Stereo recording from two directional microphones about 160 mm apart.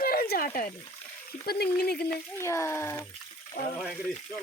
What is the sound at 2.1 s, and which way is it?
Speech, 15° left (ahead or behind).